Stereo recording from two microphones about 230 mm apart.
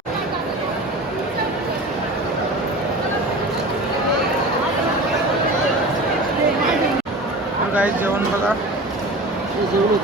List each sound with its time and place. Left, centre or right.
7.7 s speech: centre